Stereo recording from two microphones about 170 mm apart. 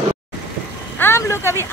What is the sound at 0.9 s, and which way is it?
Vehicle, 15° left (ahead or behind).